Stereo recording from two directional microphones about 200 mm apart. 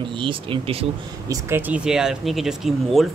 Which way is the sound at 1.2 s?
10° right (ahead or behind).